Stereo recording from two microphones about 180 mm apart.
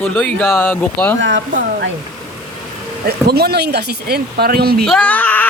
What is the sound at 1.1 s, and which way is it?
Speech, 85° right.